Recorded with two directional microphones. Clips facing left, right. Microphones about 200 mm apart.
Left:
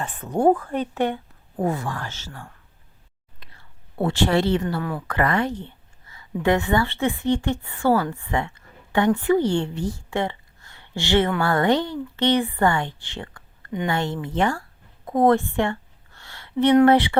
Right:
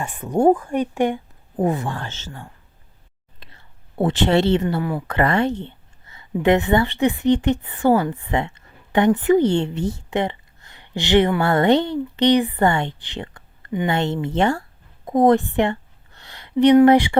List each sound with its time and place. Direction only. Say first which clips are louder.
0.0 s speech: right 3 dB; 15° right (ahead or behind)
3.4 s whispering: right 2 dB; 20° right (ahead or behind)
4.8 s speech: right 4 dB; 10° right (ahead or behind)
5.0 s speech: right 3 dB; 25° right (ahead or behind)
15.0 s a sound: right 3 dB; 15° right (ahead or behind)
16.8 s speech: right 3 dB; 15° right (ahead or behind)